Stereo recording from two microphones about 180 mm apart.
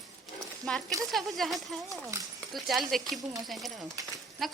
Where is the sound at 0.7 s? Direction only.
5° left (ahead or behind).